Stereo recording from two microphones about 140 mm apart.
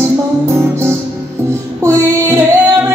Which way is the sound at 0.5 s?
20° right (ahead or behind).